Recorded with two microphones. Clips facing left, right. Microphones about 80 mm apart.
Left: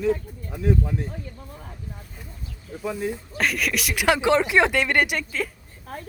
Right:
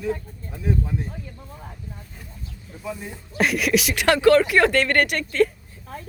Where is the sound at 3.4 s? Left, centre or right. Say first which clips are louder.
Right 5 dB; centre.